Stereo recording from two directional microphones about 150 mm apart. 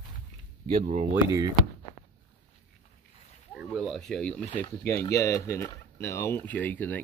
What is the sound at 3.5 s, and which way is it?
Speech, centre (ahead or behind).